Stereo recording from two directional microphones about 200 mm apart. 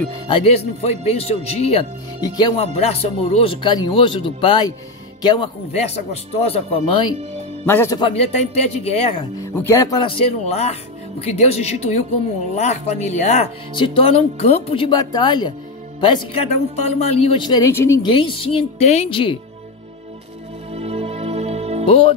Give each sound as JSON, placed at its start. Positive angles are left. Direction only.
{"t": 0.3, "sound": "speech", "side_deg": 30}
{"t": 7.6, "sound": "speech", "side_deg": 10}
{"t": 8.0, "sound": "speech", "side_deg": 30}
{"t": 9.4, "sound": "speech", "side_deg": 10}
{"t": 20.7, "sound": "music", "side_deg": -30}
{"t": 21.8, "sound": "speech", "side_deg": 25}